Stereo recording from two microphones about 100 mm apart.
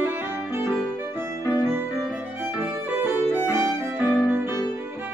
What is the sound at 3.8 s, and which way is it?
Music, 20° right (ahead or behind).